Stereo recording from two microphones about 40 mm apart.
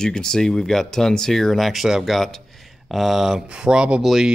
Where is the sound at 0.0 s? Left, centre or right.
Centre.